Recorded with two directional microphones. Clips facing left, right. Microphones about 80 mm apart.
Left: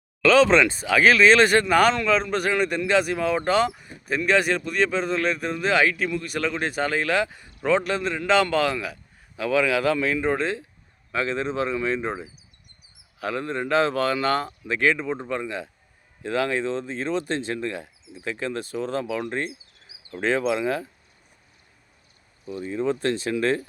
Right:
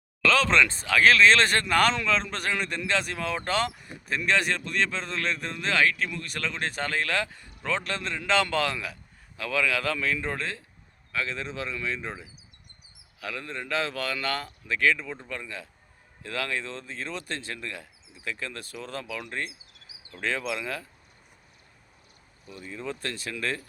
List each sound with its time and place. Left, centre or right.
0.3 s a man's voice: centre
9.4 s a man's voice: centre
11.1 s a man's voice: left
22.4 s speech: left